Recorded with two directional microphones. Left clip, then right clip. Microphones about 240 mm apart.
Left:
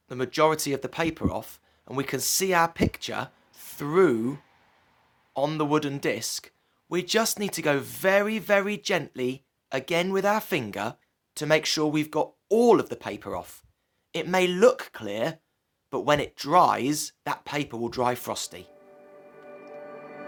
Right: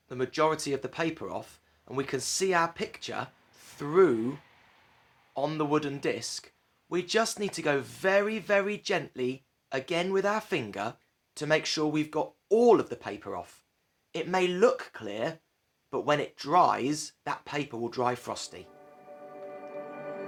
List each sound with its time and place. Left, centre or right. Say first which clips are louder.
0.1 s speech: left 4 dB; left